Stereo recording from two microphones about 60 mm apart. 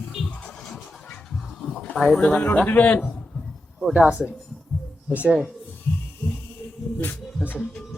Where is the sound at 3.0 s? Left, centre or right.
Centre.